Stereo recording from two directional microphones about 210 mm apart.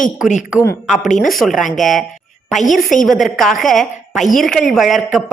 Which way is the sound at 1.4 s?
Centre (ahead or behind).